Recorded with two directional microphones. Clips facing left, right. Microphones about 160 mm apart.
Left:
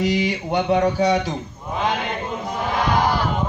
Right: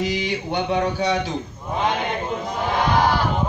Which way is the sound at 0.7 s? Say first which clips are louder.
Left 4 dB; 40° left (ahead or behind).